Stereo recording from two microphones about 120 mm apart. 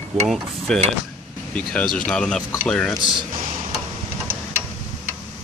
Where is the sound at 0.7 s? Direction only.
5° left (ahead or behind).